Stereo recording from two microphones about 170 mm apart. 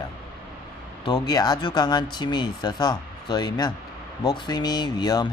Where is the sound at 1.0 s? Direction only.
25° left (ahead or behind).